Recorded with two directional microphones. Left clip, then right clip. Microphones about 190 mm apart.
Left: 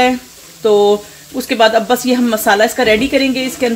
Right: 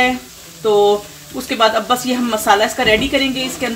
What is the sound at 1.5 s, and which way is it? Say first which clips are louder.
Speech: left 3 dB; 45° left (ahead or behind).